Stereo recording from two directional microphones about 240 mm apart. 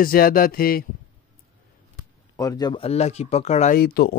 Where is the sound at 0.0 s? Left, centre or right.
Left.